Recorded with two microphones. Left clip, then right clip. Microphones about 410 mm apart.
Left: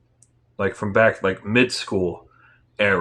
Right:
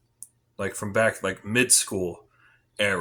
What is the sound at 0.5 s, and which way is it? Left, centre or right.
Speech, right.